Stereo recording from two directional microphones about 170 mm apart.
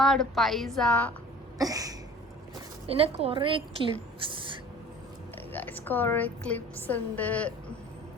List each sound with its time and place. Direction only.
0.0 s a woman's voice: centre (ahead or behind)
1.5 s cough: 20° right (ahead or behind)
2.9 s a woman's voice: 35° right (ahead or behind)
4.2 s a sound: 30° right (ahead or behind)
5.5 s a woman's voice: 10° left (ahead or behind)